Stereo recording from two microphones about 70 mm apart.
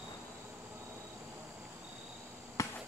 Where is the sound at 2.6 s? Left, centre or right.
Left.